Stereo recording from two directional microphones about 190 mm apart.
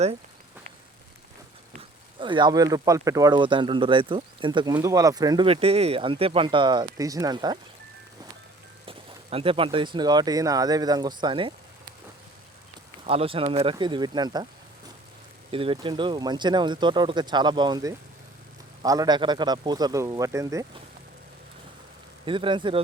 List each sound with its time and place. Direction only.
2.1 s speech: 25° right (ahead or behind)
8.9 s speech: 30° right (ahead or behind)
13.1 s speech: 30° right (ahead or behind)
15.5 s speech: 30° right (ahead or behind)
22.3 s speech: 25° right (ahead or behind)